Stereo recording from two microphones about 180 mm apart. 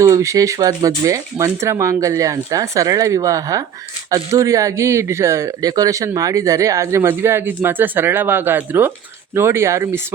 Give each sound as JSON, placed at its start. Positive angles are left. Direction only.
{"t": 0.0, "sound": "speech", "side_deg": -15}